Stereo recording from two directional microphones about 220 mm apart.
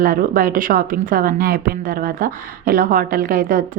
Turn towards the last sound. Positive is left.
turn(degrees=-40)  # may be behind; listen again after turning